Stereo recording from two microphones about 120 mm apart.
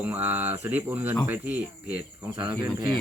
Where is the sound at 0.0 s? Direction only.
15° right (ahead or behind).